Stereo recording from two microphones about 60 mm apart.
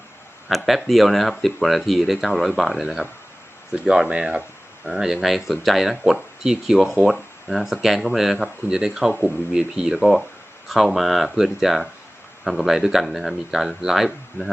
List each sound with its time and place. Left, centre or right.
0.4 s speech: centre